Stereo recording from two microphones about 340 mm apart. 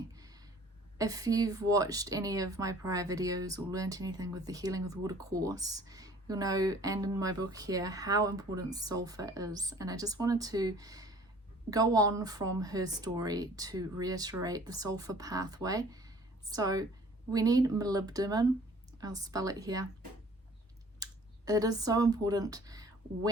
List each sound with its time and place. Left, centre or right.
0.9 s speech: centre
21.0 s speech: centre